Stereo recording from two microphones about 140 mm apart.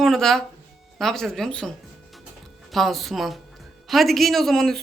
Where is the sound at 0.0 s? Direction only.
Centre (ahead or behind).